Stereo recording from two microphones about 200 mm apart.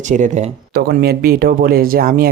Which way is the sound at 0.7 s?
50° right (ahead or behind).